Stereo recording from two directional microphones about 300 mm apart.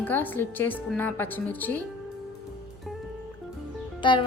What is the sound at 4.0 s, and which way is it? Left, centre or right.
Music, centre.